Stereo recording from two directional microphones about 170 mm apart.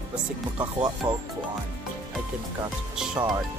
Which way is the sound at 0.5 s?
25° right (ahead or behind).